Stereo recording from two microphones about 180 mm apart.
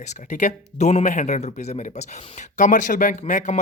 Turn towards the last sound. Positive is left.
turn(degrees=40)  # may be behind; listen again after turning